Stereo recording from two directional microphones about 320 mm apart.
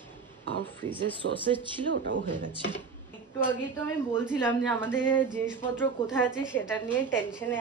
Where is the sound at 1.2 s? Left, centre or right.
Right.